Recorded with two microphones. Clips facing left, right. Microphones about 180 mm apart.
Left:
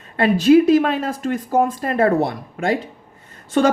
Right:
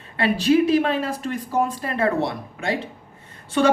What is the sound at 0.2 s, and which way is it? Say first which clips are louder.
Speech: left 5 dB; 45° left (ahead or behind).